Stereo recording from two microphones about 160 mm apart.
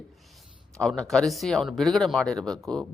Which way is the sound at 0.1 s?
Centre (ahead or behind).